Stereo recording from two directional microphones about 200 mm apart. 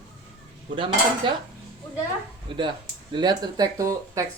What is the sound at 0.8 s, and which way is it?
Speech, 25° right (ahead or behind).